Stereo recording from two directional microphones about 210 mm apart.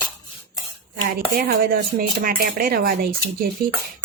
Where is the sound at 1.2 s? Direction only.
45° right (ahead or behind).